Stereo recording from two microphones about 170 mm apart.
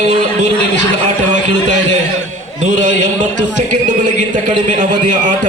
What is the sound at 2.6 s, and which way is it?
A man's voice, 45° right (ahead or behind).